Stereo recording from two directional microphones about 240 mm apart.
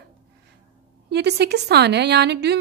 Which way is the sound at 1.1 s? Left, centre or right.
Right.